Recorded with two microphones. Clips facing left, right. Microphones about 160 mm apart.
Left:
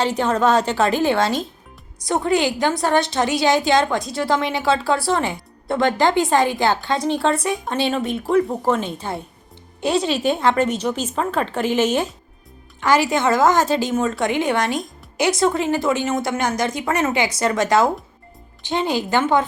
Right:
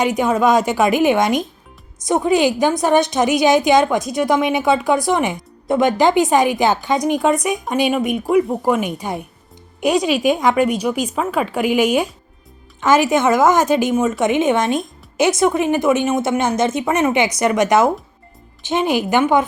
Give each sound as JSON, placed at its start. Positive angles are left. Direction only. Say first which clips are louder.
{"t": 0.0, "sound": "a woman's voice", "louder": "right 3 dB", "side_deg": -15}